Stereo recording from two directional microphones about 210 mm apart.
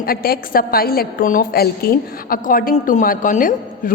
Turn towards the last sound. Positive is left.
turn(degrees=40)  # may be behind; listen again after turning